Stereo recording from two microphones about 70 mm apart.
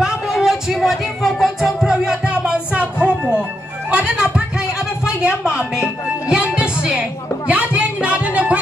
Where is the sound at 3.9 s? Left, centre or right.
Centre.